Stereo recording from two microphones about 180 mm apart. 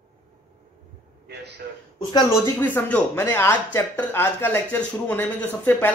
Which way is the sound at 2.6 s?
10° left (ahead or behind).